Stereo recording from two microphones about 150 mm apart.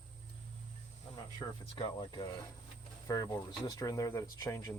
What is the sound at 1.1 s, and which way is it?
Speech, 30° left (ahead or behind).